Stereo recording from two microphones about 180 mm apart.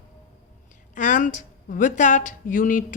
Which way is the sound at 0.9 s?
45° left (ahead or behind).